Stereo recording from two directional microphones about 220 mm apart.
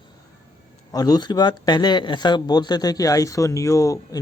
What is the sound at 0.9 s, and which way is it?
A man's voice, 15° left (ahead or behind).